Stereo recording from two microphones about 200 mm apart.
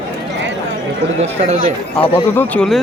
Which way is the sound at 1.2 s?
30° right (ahead or behind).